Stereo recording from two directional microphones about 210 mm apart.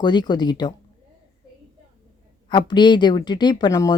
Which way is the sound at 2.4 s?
20° left (ahead or behind).